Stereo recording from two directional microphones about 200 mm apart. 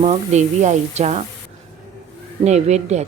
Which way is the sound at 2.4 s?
35° right (ahead or behind).